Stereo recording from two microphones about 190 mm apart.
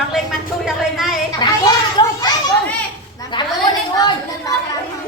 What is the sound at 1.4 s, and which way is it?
Speech, 20° left (ahead or behind).